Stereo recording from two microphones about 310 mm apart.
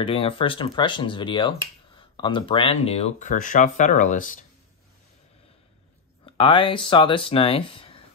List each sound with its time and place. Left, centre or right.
0.0 s speech: centre
6.2 s speech: centre